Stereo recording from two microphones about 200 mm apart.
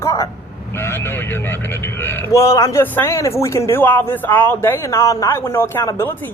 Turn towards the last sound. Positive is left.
turn(degrees=10)  # may be behind; listen again after turning